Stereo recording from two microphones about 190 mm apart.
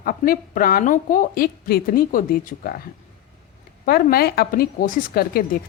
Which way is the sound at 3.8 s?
50° left (ahead or behind).